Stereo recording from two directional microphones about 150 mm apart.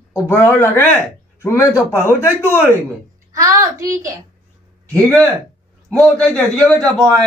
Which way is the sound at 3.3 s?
20° right (ahead or behind).